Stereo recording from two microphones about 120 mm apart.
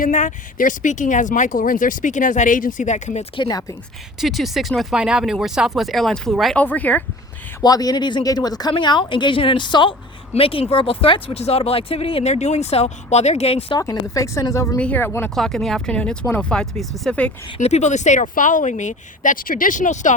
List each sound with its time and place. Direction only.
0.1 s speech: 90° left
3.3 s speech: 40° left (ahead or behind)
4.2 s speech: centre (ahead or behind)
6.6 s speech: 15° left (ahead or behind)
7.6 s speech: 30° left (ahead or behind)
10.3 s speech: 55° left (ahead or behind)
13.7 s a woman's voice: 30° left (ahead or behind)
14.8 s speech: 15° left (ahead or behind)
15.4 s speech: 5° left (ahead or behind)
17.6 s speech: 65° left (ahead or behind); by 20.1 s 90° left